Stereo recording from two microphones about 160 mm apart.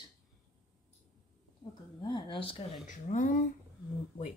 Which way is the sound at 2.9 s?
55° left (ahead or behind).